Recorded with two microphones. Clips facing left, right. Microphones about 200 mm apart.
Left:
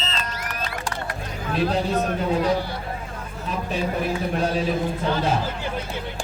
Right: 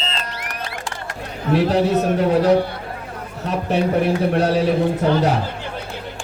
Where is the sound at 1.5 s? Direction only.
75° right (ahead or behind).